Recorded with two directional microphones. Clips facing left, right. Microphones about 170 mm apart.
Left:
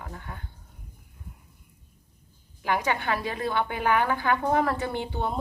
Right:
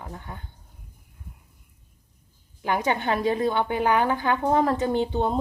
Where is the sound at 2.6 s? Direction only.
20° right (ahead or behind).